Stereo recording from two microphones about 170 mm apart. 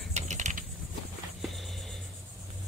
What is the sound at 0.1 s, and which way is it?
Mechanisms, 45° right (ahead or behind).